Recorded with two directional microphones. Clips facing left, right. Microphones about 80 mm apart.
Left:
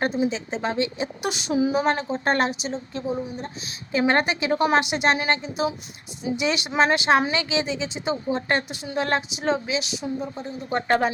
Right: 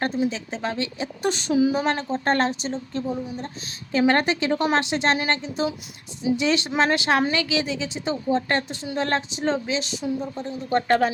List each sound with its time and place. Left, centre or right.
0.3 s a woman's voice: left